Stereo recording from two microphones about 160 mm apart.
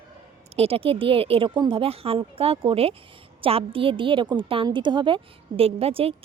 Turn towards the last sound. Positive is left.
turn(degrees=-35)  # may be behind; listen again after turning